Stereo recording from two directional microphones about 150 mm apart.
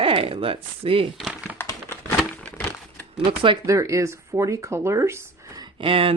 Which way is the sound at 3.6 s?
20° right (ahead or behind).